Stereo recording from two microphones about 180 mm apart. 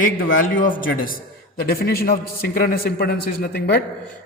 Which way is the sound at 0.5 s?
50° left (ahead or behind).